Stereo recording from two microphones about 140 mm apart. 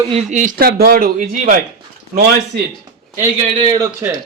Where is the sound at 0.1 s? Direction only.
55° right (ahead or behind).